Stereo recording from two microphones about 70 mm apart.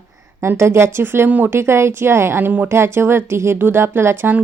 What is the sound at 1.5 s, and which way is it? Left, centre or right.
Speech, right.